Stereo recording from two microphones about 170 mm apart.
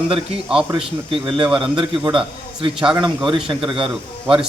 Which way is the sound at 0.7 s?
30° right (ahead or behind).